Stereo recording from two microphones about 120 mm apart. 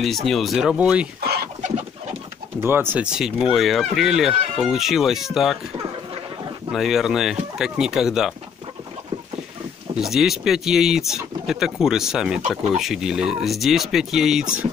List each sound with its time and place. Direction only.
0.0 s speech: centre (ahead or behind)
1.6 s chicken: 75° right (ahead or behind)
2.6 s speech: 20° right (ahead or behind)
3.1 s speech: 5° right (ahead or behind)
6.7 s speech: 5° right (ahead or behind)
9.9 s speech: 5° right (ahead or behind)